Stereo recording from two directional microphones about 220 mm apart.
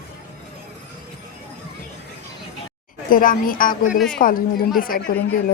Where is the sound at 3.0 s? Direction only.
40° left (ahead or behind).